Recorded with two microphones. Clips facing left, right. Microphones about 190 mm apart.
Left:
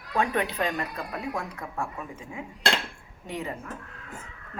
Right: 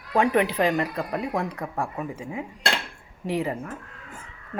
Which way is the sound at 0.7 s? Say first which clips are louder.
Right 7 dB; 30° right (ahead or behind).